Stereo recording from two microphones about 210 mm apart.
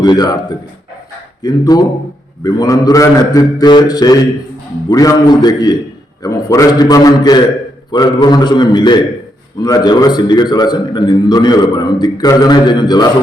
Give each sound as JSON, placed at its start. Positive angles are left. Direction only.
{"t": 0.0, "sound": "a man's voice", "side_deg": 20}
{"t": 1.4, "sound": "a man's voice", "side_deg": 20}